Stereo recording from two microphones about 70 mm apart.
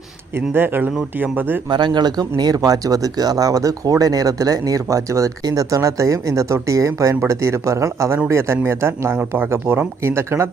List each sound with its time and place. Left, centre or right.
0.3 s speech: right
1.7 s speech: right